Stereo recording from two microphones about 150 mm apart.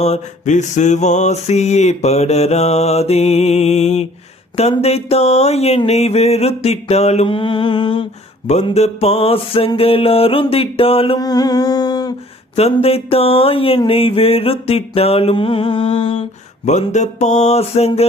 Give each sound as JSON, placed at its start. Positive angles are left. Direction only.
{"t": 0.0, "sound": "mantra", "side_deg": 50}
{"t": 11.2, "sound": "a sound", "side_deg": 25}
{"t": 12.7, "sound": "mantra", "side_deg": 40}
{"t": 16.6, "sound": "mantra", "side_deg": 50}